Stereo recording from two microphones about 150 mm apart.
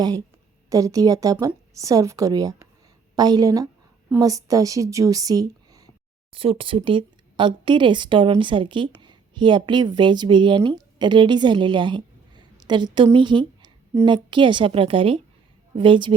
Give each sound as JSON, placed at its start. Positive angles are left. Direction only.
{"t": 0.7, "sound": "a woman's voice", "side_deg": -20}
{"t": 6.3, "sound": "a woman's voice", "side_deg": -40}